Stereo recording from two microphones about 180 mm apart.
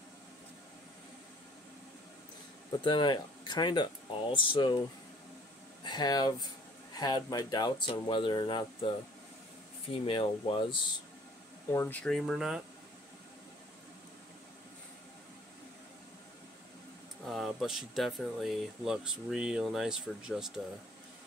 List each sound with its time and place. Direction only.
2.8 s speech: 25° left (ahead or behind)
5.9 s speech: 20° left (ahead or behind)
11.7 s speech: 10° left (ahead or behind)
17.3 s speech: centre (ahead or behind)